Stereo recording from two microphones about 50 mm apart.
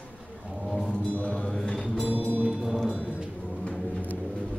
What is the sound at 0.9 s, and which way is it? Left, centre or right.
Music, left.